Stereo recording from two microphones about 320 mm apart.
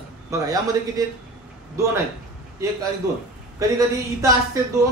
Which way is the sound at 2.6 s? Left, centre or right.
Centre.